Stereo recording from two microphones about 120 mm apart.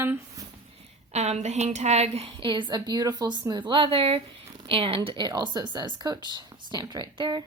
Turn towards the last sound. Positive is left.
turn(degrees=-40)  # may be behind; listen again after turning